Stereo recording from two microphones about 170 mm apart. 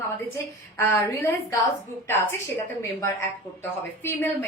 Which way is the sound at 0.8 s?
15° left (ahead or behind).